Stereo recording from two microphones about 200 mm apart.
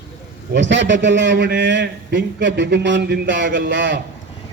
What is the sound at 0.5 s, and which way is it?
A man's voice, 65° right (ahead or behind).